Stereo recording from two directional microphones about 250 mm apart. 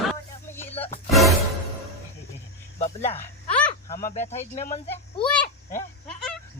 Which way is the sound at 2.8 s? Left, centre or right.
Left.